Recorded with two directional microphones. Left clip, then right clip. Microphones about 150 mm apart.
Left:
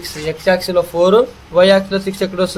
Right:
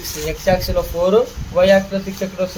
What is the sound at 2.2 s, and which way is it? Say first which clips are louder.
Speech: left 5 dB; 75° left (ahead or behind).